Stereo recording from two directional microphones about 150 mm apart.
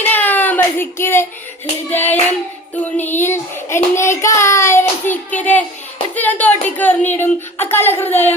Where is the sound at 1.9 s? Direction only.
15° left (ahead or behind).